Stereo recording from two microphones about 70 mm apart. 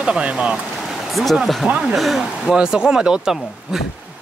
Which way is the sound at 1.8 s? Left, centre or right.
Centre.